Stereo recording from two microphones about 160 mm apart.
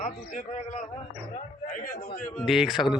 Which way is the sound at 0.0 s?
55° left (ahead or behind).